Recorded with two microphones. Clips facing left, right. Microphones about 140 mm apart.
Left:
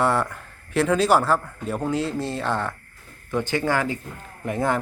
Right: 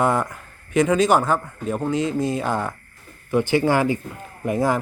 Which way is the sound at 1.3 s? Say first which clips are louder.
Right 1 dB; 10° right (ahead or behind).